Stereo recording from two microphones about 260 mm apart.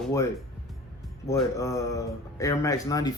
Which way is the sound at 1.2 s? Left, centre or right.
Centre.